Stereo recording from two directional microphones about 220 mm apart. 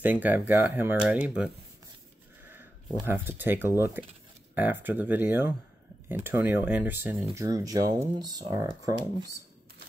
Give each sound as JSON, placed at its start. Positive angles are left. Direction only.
{"t": 0.0, "sound": "speech", "side_deg": -10}